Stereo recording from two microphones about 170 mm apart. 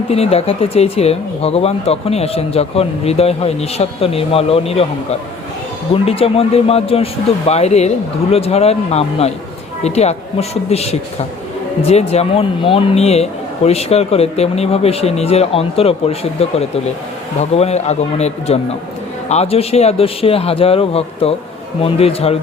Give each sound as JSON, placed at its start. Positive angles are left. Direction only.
{"t": 0.1, "sound": "speech", "side_deg": 35}
{"t": 5.9, "sound": "speech", "side_deg": 35}